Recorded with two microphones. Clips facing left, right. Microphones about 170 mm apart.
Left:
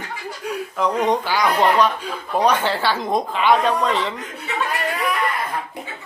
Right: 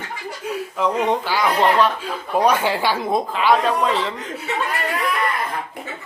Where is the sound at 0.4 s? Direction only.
Centre (ahead or behind).